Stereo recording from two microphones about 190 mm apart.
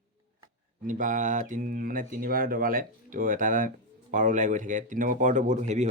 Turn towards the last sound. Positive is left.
turn(degrees=-40)  # may be behind; listen again after turning